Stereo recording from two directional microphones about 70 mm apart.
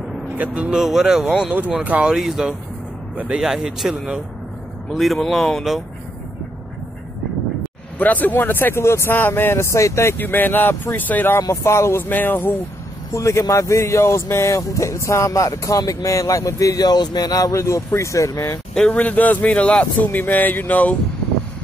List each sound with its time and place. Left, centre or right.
0.4 s speech: centre
0.7 s speech: centre
1.5 s speech: right
2.1 s speech: centre
8.0 s speech: left
10.1 s speech: left
11.4 s speech: left
12.0 s speech: left
13.1 s speech: left
17.6 s speech: left
18.8 s speech: centre